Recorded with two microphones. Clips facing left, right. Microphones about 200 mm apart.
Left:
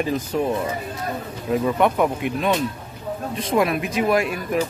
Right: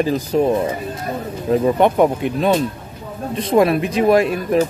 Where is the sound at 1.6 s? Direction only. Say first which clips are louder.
Right 5 dB; 30° right (ahead or behind).